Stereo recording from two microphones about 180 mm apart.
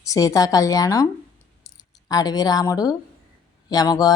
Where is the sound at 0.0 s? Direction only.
20° left (ahead or behind).